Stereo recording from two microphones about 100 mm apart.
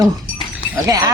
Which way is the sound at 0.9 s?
35° right (ahead or behind).